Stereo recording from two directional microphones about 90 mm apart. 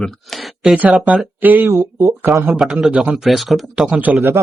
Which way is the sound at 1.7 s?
35° right (ahead or behind).